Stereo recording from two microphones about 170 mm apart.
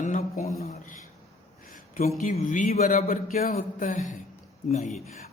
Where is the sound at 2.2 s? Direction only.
50° left (ahead or behind).